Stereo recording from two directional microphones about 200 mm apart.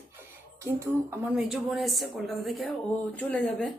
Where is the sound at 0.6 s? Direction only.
15° right (ahead or behind).